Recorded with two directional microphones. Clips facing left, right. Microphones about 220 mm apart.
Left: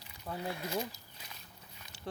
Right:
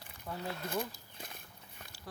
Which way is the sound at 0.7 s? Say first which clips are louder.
Even; 50° right (ahead or behind).